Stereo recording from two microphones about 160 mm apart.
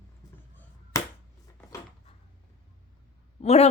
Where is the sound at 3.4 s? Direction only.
40° left (ahead or behind).